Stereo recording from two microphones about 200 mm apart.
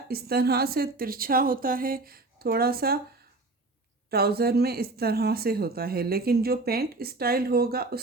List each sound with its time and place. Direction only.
0.1 s speech: 50° right (ahead or behind)
4.1 s speech: 50° right (ahead or behind)